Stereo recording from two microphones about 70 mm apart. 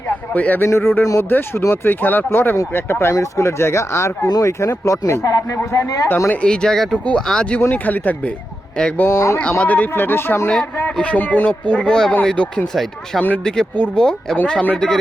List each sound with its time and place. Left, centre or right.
0.1 s speech: left
0.6 s speech: left
6.3 s speech: centre
7.7 s speech: left
9.0 s speech: left
9.4 s speech: left
9.9 s speech: left
10.9 s speech: centre
12.7 s speech: centre
13.4 s speech: centre